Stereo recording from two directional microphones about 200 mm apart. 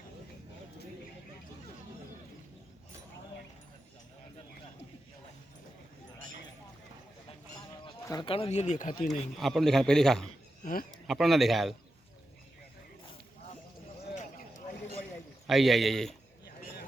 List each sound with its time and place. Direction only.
8.0 s speech: 20° left (ahead or behind); by 9.0 s 40° left (ahead or behind)
9.4 s a man's voice: centre (ahead or behind)
10.6 s speech: 45° left (ahead or behind)
10.9 s a man's voice: centre (ahead or behind)
15.4 s a man's voice: centre (ahead or behind)